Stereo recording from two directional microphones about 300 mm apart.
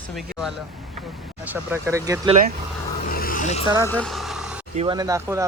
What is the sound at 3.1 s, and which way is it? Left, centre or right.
Vehicle, left.